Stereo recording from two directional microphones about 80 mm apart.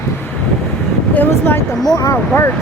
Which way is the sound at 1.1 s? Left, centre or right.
Left.